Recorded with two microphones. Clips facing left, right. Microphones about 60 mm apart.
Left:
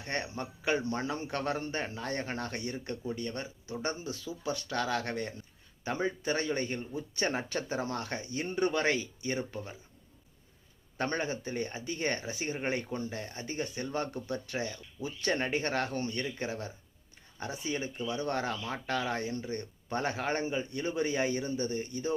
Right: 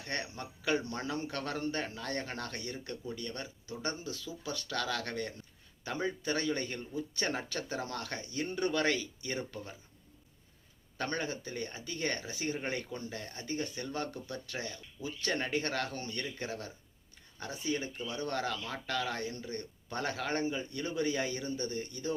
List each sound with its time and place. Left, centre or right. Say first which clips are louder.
0.0 s speech: left 3 dB; left
10.9 s speech: left 3 dB; left